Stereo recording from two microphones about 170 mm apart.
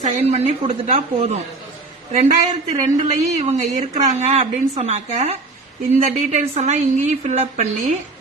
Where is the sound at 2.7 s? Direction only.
45° right (ahead or behind).